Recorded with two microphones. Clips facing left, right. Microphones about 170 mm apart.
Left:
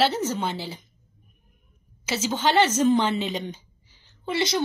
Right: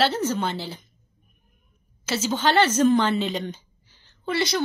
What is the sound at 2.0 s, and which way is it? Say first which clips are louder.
A woman's voice: right 1 dB; 15° left (ahead or behind).